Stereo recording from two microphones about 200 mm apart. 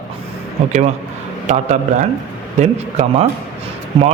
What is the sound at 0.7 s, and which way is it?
Speech, 35° right (ahead or behind).